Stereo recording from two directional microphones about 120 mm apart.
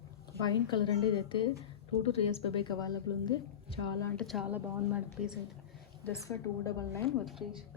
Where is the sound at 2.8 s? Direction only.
35° left (ahead or behind).